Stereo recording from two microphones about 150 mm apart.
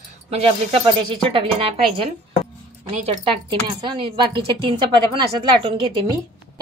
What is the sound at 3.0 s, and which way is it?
A woman's voice, 40° right (ahead or behind).